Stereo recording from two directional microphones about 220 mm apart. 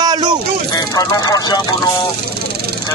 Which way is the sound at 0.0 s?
20° right (ahead or behind).